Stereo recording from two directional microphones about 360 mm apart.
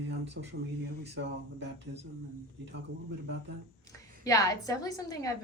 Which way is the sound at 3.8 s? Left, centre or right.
Centre.